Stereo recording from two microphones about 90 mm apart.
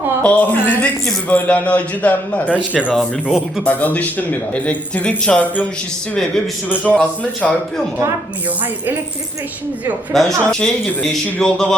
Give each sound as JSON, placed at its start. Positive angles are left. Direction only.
{"t": 0.2, "sound": "speech", "side_deg": 15}
{"t": 2.9, "sound": "speech", "side_deg": 0}
{"t": 3.6, "sound": "speech", "side_deg": 20}
{"t": 6.7, "sound": "speech", "side_deg": 15}
{"t": 7.4, "sound": "speech", "side_deg": 0}
{"t": 10.1, "sound": "speech", "side_deg": 5}